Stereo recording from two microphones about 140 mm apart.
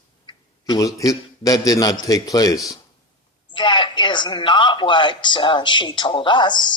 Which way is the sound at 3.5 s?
35° left (ahead or behind).